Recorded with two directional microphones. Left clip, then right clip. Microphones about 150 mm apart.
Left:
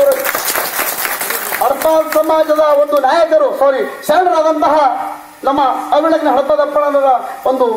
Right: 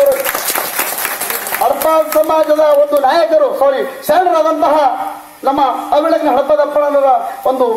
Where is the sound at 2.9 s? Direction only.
30° right (ahead or behind).